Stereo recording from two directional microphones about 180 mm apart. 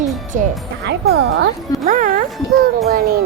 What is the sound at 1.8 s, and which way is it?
Speech, 45° right (ahead or behind).